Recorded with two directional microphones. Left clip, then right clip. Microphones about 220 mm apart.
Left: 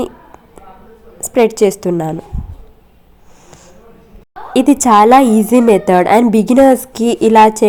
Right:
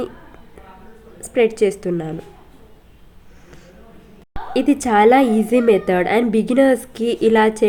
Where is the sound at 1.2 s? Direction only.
20° left (ahead or behind).